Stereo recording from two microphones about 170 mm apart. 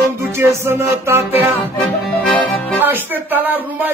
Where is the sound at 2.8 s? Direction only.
10° right (ahead or behind).